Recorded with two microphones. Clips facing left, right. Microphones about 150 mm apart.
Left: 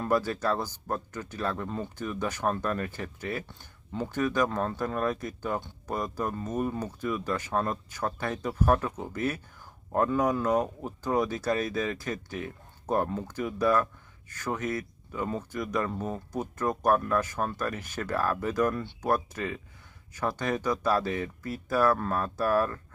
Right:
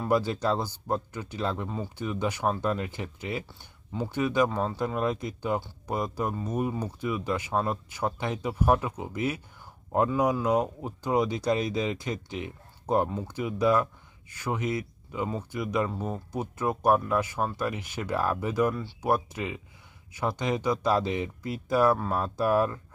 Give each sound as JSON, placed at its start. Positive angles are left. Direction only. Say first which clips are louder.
{"t": 0.0, "sound": "speech", "louder": "right 1 dB", "side_deg": -15}
{"t": 21.9, "sound": "speech", "louder": "right 1 dB", "side_deg": -5}
{"t": 22.2, "sound": "speech", "louder": "right 2 dB", "side_deg": -15}